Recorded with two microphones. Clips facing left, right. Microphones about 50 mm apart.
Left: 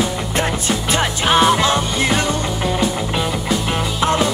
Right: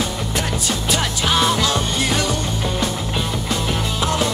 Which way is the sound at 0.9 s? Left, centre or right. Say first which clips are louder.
Left 4 dB; left.